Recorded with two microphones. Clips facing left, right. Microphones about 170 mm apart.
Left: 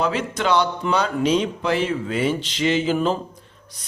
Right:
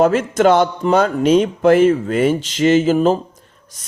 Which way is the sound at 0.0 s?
45° right (ahead or behind).